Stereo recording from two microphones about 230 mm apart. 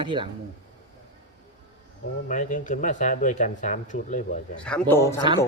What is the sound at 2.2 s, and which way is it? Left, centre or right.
Speech, left.